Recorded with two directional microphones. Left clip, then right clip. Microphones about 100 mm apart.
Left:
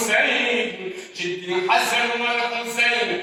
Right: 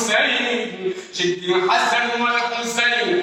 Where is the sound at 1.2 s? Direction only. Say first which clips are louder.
Right 5 dB; 35° right (ahead or behind).